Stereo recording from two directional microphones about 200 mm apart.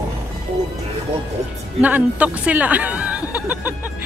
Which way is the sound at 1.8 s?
5° right (ahead or behind).